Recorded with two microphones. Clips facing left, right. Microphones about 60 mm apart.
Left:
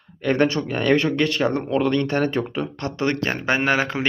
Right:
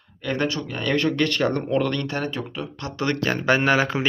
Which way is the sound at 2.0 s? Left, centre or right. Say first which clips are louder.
Left 6 dB; left.